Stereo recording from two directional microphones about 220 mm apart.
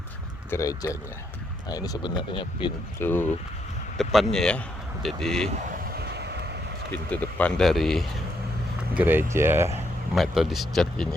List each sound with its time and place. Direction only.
0.5 s speech: 15° left (ahead or behind)
3.0 s speech: 10° left (ahead or behind)
5.9 s vehicle: 45° right (ahead or behind)
6.9 s speech: 5° left (ahead or behind)
9.0 s speech: 10° right (ahead or behind)
10.2 s speech: centre (ahead or behind)